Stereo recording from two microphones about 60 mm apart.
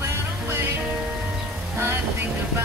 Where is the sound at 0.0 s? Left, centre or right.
Right.